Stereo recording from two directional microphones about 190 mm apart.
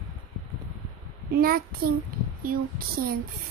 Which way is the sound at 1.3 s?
50° right (ahead or behind).